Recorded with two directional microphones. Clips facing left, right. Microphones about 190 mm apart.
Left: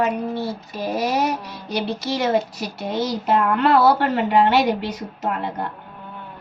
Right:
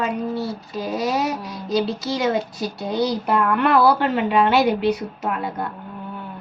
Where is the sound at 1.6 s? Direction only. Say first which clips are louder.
Right 3 dB; 70° left (ahead or behind).